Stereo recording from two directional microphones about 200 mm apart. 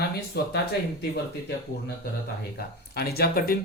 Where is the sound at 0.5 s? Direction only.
55° left (ahead or behind).